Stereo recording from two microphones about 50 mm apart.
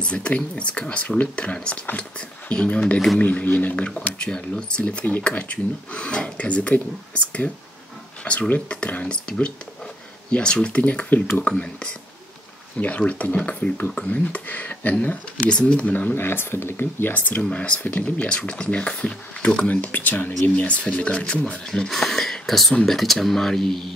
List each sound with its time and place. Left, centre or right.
0.0 s speech: left
3.2 s speech: left
4.0 s speech: left
13.7 s speech: left
14.0 s speech: left
16.2 s speech: left
17.4 s speech: left
20.5 s speech: left
21.6 s speech: centre